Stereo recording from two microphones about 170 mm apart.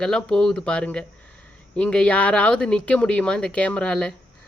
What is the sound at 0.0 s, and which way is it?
A woman's voice, 5° left (ahead or behind).